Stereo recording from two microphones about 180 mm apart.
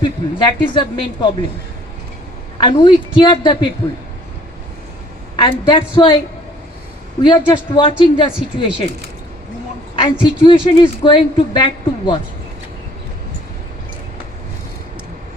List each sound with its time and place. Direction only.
0.0 s a woman's voice: 25° left (ahead or behind)
2.6 s a woman's voice: 25° left (ahead or behind)
5.4 s a woman's voice: 25° left (ahead or behind)
7.2 s a woman's voice: 25° left (ahead or behind)
9.9 s a woman's voice: 30° left (ahead or behind)